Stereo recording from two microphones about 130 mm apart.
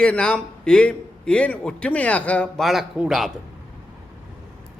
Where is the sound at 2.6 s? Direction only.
Centre (ahead or behind).